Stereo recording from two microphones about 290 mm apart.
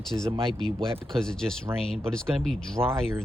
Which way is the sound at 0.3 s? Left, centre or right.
Centre.